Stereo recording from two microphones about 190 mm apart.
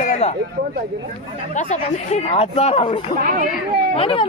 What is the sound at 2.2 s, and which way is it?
Speech, 35° left (ahead or behind).